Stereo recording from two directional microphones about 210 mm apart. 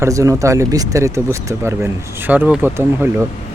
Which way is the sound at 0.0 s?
15° right (ahead or behind).